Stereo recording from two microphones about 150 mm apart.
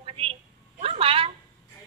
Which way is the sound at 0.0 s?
40° right (ahead or behind).